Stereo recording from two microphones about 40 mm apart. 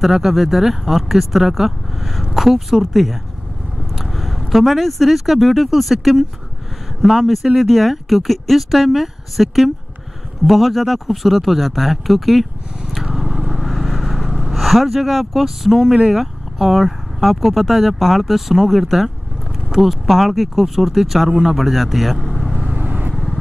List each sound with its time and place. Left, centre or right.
0.0 s speech: centre
16.2 s speech: centre
22.8 s vehicle: right